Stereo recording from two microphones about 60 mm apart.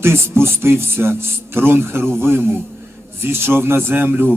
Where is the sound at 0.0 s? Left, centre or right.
Right.